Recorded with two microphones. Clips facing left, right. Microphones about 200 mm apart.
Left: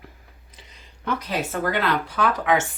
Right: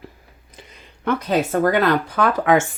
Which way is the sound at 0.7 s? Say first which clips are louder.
Right 6 dB; 55° right (ahead or behind).